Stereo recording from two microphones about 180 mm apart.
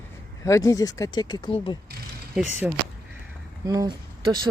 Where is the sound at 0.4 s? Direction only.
15° left (ahead or behind).